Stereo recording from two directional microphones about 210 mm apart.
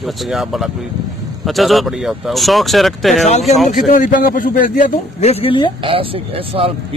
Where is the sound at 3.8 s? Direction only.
40° left (ahead or behind).